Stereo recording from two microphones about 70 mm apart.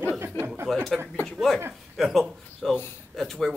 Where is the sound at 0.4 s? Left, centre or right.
Left.